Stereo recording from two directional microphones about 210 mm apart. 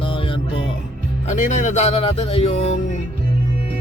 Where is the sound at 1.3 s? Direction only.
35° left (ahead or behind).